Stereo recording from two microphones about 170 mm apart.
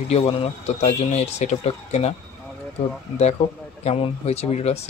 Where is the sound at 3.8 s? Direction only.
35° left (ahead or behind).